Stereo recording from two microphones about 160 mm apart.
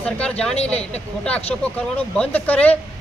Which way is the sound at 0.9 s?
5° left (ahead or behind).